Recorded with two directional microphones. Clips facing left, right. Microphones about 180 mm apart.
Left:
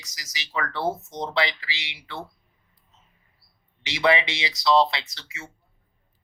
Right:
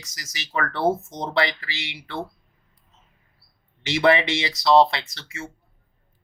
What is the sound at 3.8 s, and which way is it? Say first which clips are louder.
Speech: right 3 dB; 50° right (ahead or behind).